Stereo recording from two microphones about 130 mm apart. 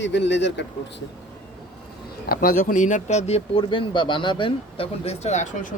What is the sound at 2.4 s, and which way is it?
Speech, 90° left.